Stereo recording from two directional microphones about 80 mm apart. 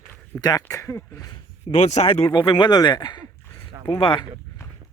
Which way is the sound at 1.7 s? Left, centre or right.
Left.